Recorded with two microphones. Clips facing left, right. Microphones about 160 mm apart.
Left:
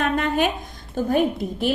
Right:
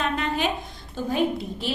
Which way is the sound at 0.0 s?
50° left (ahead or behind).